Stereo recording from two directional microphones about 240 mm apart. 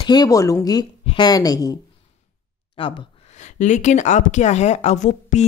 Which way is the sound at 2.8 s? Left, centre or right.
Left.